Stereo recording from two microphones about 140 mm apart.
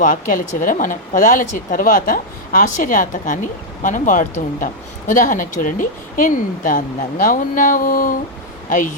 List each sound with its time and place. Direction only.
0.0 s speech: 75° left (ahead or behind)